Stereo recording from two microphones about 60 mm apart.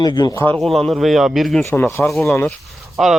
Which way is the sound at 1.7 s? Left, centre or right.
Left.